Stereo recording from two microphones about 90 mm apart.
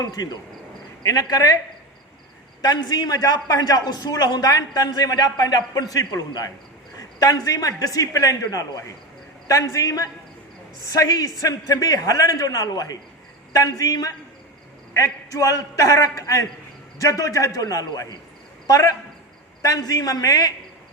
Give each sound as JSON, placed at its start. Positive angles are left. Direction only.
{"t": 0.0, "sound": "a man's voice", "side_deg": 45}
{"t": 2.6, "sound": "a man's voice", "side_deg": 45}